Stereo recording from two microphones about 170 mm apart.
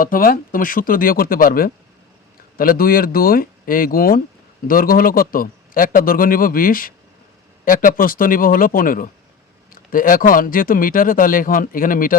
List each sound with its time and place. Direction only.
0.0 s speech: 55° left (ahead or behind)